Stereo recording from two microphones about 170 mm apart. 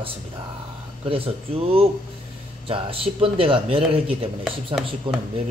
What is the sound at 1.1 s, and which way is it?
Speech, 35° right (ahead or behind).